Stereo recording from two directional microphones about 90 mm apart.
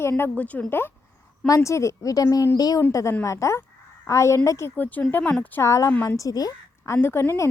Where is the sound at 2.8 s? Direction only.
30° left (ahead or behind).